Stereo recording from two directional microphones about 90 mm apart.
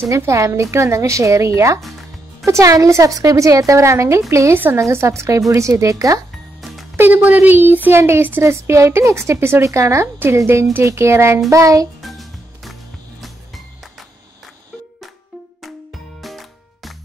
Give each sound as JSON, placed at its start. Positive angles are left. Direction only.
{"t": 0.2, "sound": "a woman's voice", "side_deg": -30}
{"t": 4.6, "sound": "speech", "side_deg": -20}
{"t": 4.8, "sound": "a woman's voice", "side_deg": -35}
{"t": 6.6, "sound": "music", "side_deg": 0}
{"t": 7.0, "sound": "a woman's voice", "side_deg": -20}
{"t": 10.1, "sound": "a woman's voice", "side_deg": -25}
{"t": 12.0, "sound": "music", "side_deg": 0}
{"t": 15.6, "sound": "music", "side_deg": 0}